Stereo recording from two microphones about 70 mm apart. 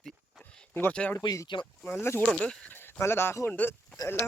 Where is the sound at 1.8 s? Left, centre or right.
Left.